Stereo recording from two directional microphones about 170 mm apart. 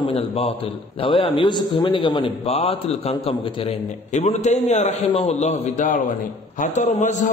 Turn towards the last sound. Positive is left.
turn(degrees=45)  # may be behind; listen again after turning